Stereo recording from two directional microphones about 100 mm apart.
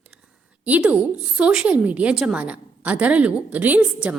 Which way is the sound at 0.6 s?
15° right (ahead or behind).